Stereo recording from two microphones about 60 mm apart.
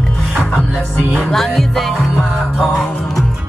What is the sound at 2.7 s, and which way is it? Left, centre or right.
Speech, centre.